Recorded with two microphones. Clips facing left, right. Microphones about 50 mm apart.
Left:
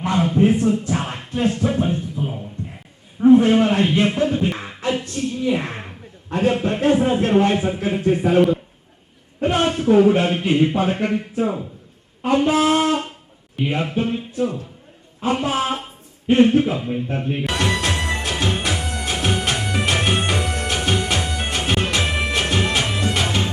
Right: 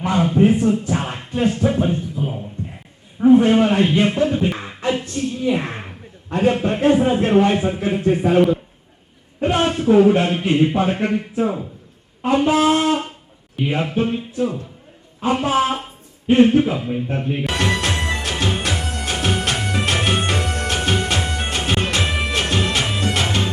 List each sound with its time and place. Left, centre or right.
0.0 s music: centre
3.2 s speech: centre
18.3 s music: centre